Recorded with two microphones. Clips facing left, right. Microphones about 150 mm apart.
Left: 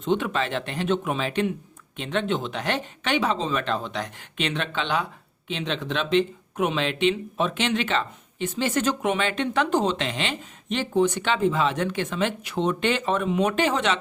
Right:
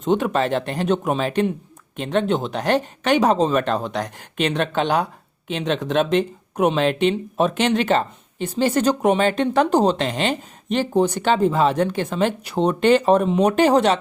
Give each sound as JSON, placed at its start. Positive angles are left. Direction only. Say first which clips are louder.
{"t": 0.0, "sound": "speech", "louder": "right 5 dB", "side_deg": -45}